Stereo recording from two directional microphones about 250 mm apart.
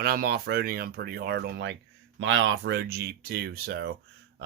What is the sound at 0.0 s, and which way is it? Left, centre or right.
A man's voice, right.